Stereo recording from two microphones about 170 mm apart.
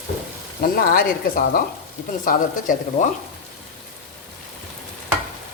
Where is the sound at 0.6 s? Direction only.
60° left (ahead or behind).